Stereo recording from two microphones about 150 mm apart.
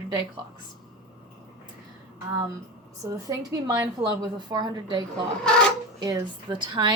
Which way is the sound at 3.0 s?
20° right (ahead or behind).